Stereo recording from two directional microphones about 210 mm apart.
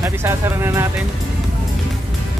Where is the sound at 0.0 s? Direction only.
10° right (ahead or behind).